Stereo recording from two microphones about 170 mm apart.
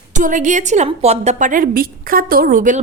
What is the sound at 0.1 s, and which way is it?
A woman's voice, 50° right (ahead or behind).